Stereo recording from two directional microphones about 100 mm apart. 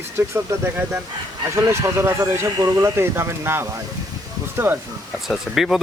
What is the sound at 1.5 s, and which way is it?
Speech, 25° right (ahead or behind).